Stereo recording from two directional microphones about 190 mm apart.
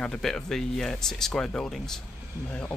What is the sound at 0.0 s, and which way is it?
Speech, 5° left (ahead or behind).